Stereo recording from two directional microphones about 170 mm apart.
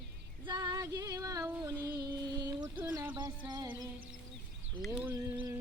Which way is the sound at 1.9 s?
20° right (ahead or behind).